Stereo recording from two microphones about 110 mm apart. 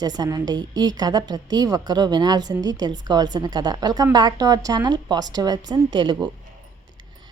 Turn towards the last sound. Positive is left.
turn(degrees=-45)  # may be behind; listen again after turning